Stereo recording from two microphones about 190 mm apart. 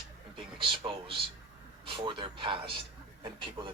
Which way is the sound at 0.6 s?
25° right (ahead or behind).